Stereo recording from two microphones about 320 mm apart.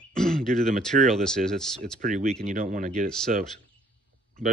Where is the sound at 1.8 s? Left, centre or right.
Right.